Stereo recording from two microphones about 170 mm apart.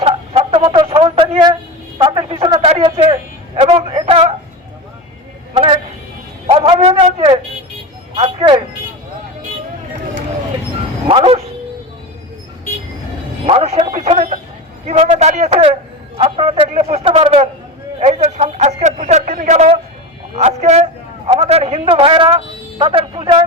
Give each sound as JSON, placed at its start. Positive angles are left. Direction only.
{"t": 0.0, "sound": "a sound", "side_deg": -35}
{"t": 2.0, "sound": "a man's voice", "side_deg": -30}
{"t": 5.5, "sound": "a man's voice", "side_deg": -35}
{"t": 11.1, "sound": "speech", "side_deg": -35}
{"t": 13.4, "sound": "a sound", "side_deg": -35}
{"t": 14.8, "sound": "a man's voice", "side_deg": -45}
{"t": 20.3, "sound": "a man's voice", "side_deg": -40}